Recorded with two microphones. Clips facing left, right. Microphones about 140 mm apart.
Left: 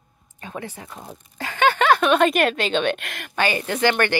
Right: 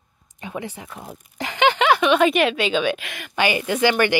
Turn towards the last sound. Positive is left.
turn(degrees=-10)  # may be behind; listen again after turning